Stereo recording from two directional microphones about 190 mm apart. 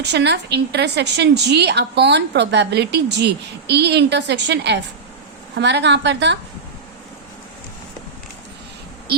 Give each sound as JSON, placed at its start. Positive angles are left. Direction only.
{"t": 0.0, "sound": "a woman's voice", "side_deg": -65}